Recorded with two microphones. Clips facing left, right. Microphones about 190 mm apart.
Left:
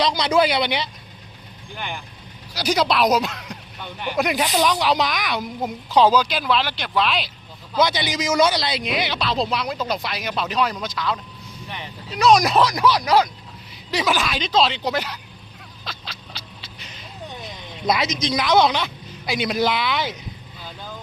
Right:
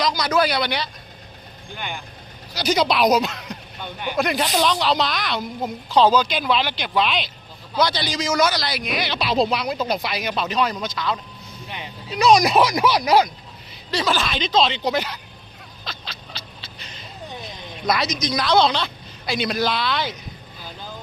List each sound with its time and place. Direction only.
0.0 s a man's voice: 25° left (ahead or behind)
2.6 s speech: 5° left (ahead or behind)
4.2 s a woman's voice: 15° left (ahead or behind)
7.8 s a man's voice: 20° left (ahead or behind)
9.1 s speech: 10° right (ahead or behind)
12.2 s speech: centre (ahead or behind)
13.9 s a woman's voice: 15° left (ahead or behind)
17.8 s a woman's voice: 25° left (ahead or behind)